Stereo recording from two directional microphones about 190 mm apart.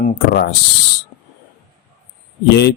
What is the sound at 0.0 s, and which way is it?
Speech, 40° left (ahead or behind).